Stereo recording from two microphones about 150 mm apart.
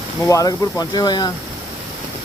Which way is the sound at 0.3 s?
25° left (ahead or behind).